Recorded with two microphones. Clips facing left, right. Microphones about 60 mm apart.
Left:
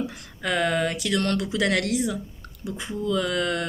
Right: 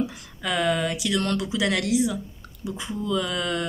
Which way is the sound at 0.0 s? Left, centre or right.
Left.